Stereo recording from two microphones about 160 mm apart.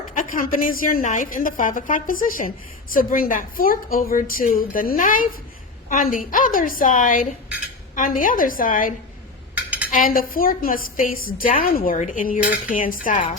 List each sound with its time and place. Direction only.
0.1 s a sound: 60° left (ahead or behind)
0.7 s a woman's voice: 60° left (ahead or behind)
9.6 s cutlery: 10° right (ahead or behind)
9.9 s a woman's voice: 60° left (ahead or behind)